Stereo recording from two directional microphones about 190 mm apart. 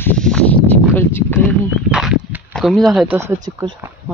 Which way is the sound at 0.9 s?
10° left (ahead or behind).